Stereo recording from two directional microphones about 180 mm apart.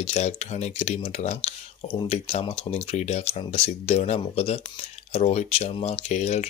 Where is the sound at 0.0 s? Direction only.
35° left (ahead or behind).